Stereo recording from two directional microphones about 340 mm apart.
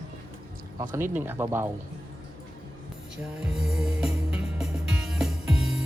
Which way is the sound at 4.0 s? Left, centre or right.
Centre.